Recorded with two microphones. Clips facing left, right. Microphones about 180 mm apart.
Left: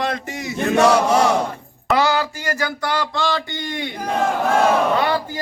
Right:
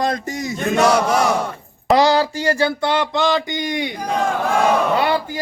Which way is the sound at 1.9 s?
35° right (ahead or behind).